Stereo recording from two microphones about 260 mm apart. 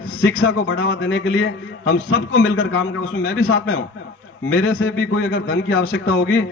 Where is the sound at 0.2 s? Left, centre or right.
Left.